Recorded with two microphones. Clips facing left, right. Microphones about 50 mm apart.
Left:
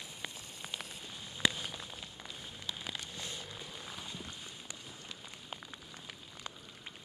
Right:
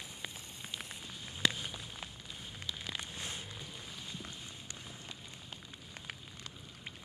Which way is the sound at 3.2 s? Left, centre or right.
Right.